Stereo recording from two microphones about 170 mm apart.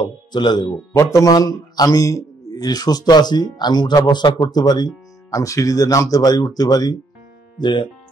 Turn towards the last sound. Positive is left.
turn(degrees=30)  # may be behind; listen again after turning